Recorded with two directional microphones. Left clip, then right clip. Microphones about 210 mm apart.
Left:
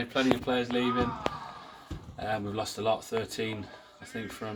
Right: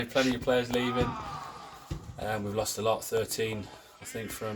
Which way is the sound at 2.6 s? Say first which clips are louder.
Right 2 dB; 5° right (ahead or behind).